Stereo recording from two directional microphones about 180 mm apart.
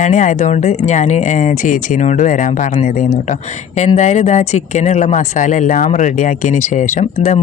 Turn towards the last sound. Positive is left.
turn(degrees=40)  # may be behind; listen again after turning